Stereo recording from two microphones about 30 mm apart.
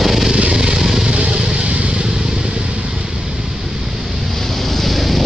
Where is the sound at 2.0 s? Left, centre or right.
Right.